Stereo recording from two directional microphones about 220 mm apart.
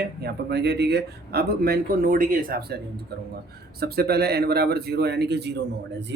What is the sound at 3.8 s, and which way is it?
Speech, 45° right (ahead or behind).